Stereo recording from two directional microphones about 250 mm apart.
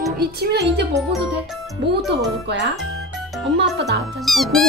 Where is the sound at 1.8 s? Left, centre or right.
Right.